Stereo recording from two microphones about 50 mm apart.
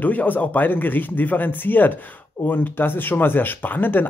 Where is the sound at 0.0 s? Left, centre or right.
Left.